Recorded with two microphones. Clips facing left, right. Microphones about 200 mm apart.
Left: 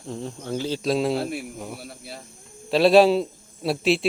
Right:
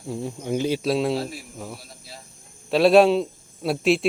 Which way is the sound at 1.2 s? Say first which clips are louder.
Left 3 dB; 65° left (ahead or behind).